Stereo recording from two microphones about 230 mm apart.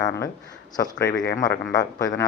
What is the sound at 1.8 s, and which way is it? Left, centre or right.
Speech, centre.